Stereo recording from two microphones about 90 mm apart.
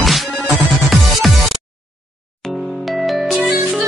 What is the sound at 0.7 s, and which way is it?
Music, centre (ahead or behind).